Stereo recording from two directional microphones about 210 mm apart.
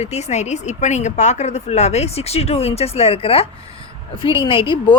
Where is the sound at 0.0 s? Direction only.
30° left (ahead or behind).